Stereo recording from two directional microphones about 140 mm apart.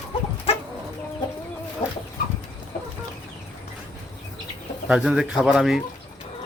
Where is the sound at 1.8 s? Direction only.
35° left (ahead or behind).